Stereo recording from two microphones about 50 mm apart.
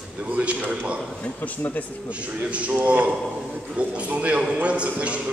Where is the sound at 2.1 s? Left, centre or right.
Right.